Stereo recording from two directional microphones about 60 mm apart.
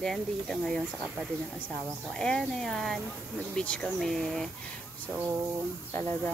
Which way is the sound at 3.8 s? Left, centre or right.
Centre.